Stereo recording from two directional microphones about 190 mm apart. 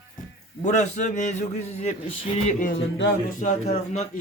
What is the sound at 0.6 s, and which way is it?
A man's voice, 40° left (ahead or behind).